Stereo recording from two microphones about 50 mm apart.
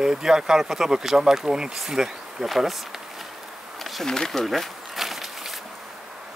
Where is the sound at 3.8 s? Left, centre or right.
Centre.